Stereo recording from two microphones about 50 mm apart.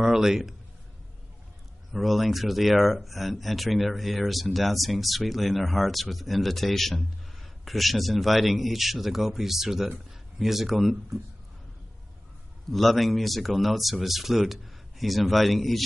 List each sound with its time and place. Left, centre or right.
0.0 s a man's voice: centre
1.9 s speech: centre
12.7 s speech: centre